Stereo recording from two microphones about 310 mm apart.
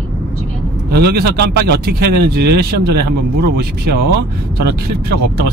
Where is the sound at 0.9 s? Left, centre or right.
Right.